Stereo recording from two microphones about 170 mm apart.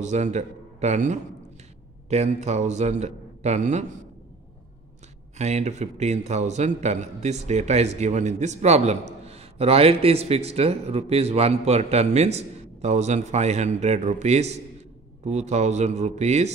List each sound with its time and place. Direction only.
0.0 s a man's voice: 45° right (ahead or behind)
5.4 s a man's voice: 40° right (ahead or behind)